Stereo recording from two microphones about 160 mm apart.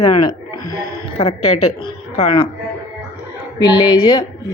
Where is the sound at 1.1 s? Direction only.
40° left (ahead or behind).